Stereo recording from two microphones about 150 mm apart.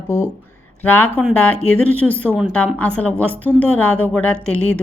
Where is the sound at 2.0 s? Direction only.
10° left (ahead or behind).